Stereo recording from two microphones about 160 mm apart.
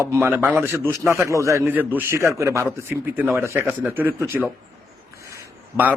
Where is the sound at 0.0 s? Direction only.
15° right (ahead or behind).